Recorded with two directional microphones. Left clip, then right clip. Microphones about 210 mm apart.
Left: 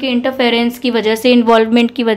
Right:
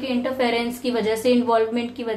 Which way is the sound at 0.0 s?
45° left (ahead or behind).